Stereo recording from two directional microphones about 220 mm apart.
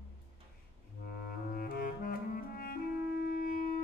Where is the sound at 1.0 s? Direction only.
45° left (ahead or behind).